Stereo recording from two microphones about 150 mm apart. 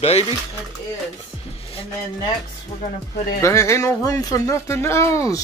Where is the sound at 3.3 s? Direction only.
20° left (ahead or behind).